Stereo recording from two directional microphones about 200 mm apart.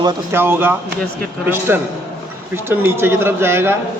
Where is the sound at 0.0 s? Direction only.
10° right (ahead or behind).